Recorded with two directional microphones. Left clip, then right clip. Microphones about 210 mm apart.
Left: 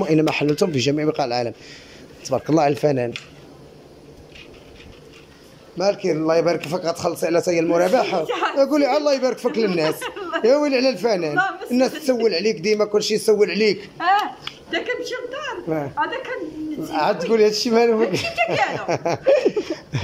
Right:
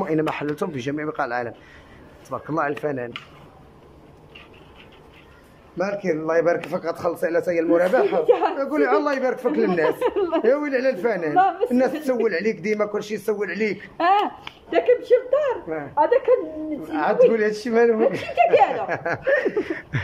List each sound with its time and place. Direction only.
0.0 s a man's voice: 10° left (ahead or behind)
2.5 s a man's voice: 15° left (ahead or behind)
5.8 s a man's voice: 10° left (ahead or behind)
8.3 s speech: 20° right (ahead or behind)
8.5 s a man's voice: 10° left (ahead or behind)
9.9 s speech: 20° right (ahead or behind)
10.4 s a man's voice: 10° left (ahead or behind)
13.9 s speech: 15° right (ahead or behind)
14.7 s speech: 25° right (ahead or behind)
16.9 s a man's voice: 10° left (ahead or behind)
18.3 s speech: 15° right (ahead or behind)
18.9 s a man's voice: 10° left (ahead or behind)